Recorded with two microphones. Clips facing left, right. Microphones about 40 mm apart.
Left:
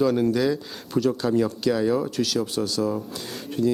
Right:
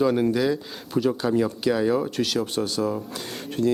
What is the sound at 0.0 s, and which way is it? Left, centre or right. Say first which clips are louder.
Speech: even; centre.